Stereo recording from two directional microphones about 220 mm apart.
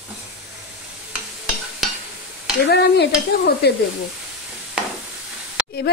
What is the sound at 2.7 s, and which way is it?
A woman's voice, 50° left (ahead or behind).